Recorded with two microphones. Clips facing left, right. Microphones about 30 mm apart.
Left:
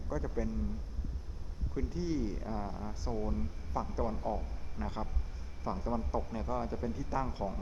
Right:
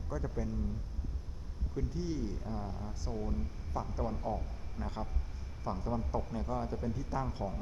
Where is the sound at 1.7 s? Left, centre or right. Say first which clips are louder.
Left 2 dB; centre.